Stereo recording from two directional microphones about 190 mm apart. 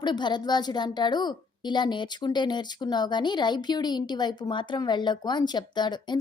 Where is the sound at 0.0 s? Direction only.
25° left (ahead or behind).